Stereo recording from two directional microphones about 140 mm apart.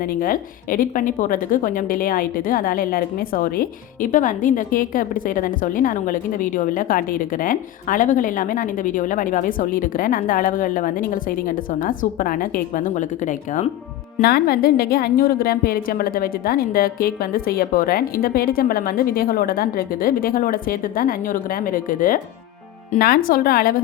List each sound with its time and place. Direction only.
0.0 s a woman's voice: 90° left; by 13.7 s 65° left (ahead or behind)
14.2 s a woman's voice: 90° left
22.9 s a woman's voice: 90° left